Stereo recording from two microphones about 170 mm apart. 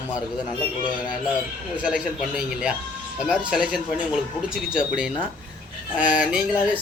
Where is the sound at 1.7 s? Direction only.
5° right (ahead or behind).